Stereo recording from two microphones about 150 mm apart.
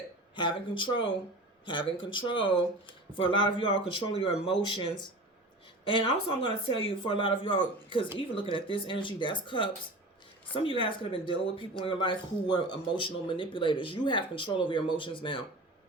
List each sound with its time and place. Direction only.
0.3 s speech: 35° left (ahead or behind)